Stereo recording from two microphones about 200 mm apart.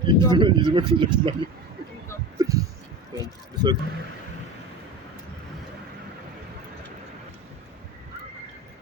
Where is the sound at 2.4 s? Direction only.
15° right (ahead or behind).